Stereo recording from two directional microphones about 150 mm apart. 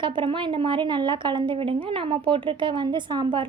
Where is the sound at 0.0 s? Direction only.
35° right (ahead or behind).